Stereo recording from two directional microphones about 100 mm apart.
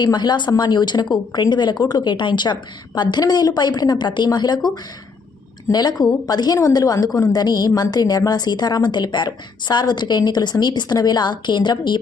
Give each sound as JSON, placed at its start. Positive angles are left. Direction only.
{"t": 0.0, "sound": "a woman's voice", "side_deg": 45}
{"t": 5.7, "sound": "a woman's voice", "side_deg": 40}